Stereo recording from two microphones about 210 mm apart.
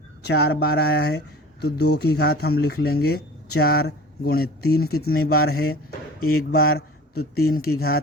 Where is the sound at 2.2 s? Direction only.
50° left (ahead or behind).